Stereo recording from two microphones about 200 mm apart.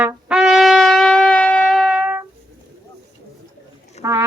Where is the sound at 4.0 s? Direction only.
15° right (ahead or behind).